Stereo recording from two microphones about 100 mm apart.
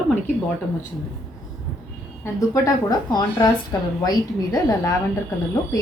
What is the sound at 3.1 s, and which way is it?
A woman's voice, 45° left (ahead or behind).